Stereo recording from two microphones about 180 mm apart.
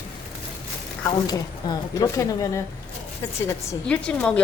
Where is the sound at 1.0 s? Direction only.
20° left (ahead or behind).